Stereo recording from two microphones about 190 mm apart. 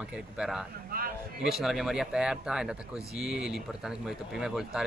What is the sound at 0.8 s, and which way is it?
Speech, 50° right (ahead or behind).